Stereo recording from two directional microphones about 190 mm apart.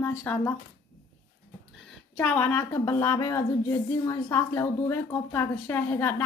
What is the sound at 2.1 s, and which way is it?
A woman's voice, 10° left (ahead or behind).